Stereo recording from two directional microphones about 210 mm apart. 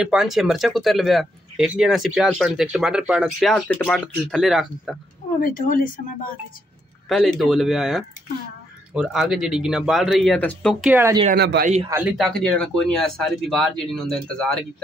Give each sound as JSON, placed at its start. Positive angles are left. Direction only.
{"t": 0.0, "sound": "speech", "side_deg": 0}
{"t": 5.4, "sound": "speech", "side_deg": 40}
{"t": 7.1, "sound": "speech", "side_deg": 0}
{"t": 10.9, "sound": "speech", "side_deg": -10}
{"t": 11.3, "sound": "a man's voice", "side_deg": -50}
{"t": 11.9, "sound": "speech", "side_deg": -5}